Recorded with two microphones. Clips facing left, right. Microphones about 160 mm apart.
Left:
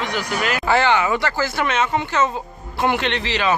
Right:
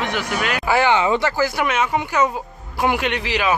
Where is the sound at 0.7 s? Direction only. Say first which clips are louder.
Right 1 dB; 15° right (ahead or behind).